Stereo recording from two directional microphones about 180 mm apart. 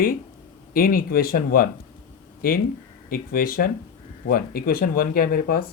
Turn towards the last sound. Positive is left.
turn(degrees=55)  # may be behind; listen again after turning